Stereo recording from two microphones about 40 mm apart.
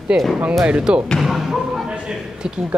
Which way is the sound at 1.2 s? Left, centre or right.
Centre.